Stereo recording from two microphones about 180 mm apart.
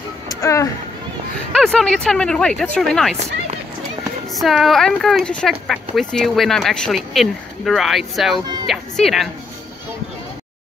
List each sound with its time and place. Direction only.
0.3 s speech: 15° left (ahead or behind)
1.5 s speech: centre (ahead or behind)
4.3 s speech: centre (ahead or behind)